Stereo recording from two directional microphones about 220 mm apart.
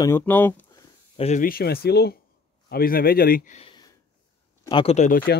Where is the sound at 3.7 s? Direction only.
20° left (ahead or behind).